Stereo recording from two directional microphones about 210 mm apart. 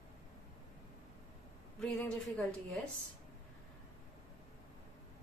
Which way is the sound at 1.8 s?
5° left (ahead or behind).